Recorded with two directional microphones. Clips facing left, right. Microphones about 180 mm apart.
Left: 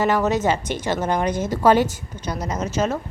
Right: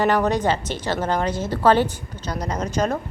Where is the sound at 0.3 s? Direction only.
10° left (ahead or behind).